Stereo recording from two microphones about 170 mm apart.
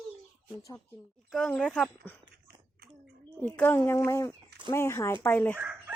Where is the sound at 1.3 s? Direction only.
5° left (ahead or behind).